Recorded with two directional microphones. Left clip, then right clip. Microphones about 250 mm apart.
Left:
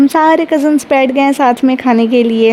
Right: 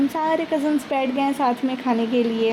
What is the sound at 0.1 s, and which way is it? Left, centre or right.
A woman's voice, left.